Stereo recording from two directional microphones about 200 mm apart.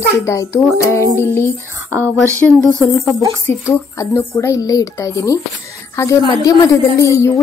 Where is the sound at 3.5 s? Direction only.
10° left (ahead or behind).